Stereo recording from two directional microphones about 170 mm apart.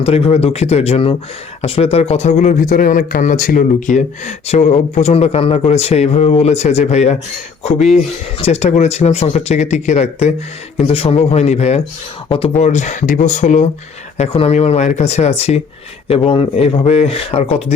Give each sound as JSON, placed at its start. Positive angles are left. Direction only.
{"t": 0.0, "sound": "speech", "side_deg": 35}
{"t": 8.4, "sound": "speech", "side_deg": 40}